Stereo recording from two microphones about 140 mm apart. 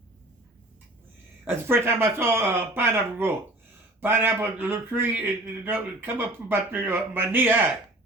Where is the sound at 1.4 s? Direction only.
15° right (ahead or behind).